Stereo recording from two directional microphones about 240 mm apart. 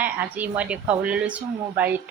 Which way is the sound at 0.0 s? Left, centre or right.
Centre.